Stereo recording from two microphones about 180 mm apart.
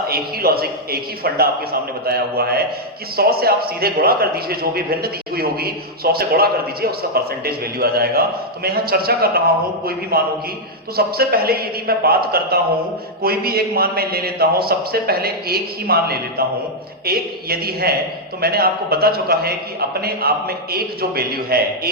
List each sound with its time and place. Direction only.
0.1 s a man's voice: 60° right (ahead or behind)